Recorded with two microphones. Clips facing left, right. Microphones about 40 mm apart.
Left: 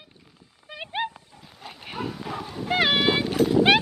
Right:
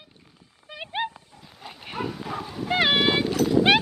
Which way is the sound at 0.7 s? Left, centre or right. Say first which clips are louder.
Even; centre.